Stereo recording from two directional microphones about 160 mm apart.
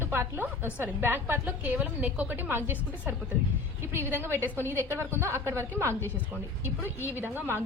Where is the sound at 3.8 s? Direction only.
15° right (ahead or behind).